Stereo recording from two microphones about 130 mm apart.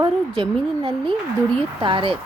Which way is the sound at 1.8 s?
40° right (ahead or behind).